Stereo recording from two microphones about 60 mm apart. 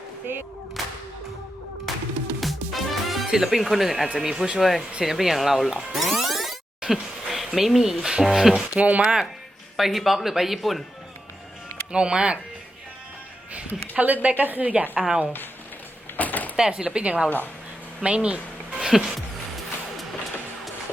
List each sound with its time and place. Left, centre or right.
0.8 s whip: centre
1.9 s music: centre
3.2 s speech: centre
8.8 s speech: centre
9.7 s speech: centre
11.9 s speech: centre
13.9 s a woman's voice: right
16.1 s a sound: left
16.6 s speech: centre
17.2 s a woman's voice: left
18.0 s a sound: centre
18.9 s music: centre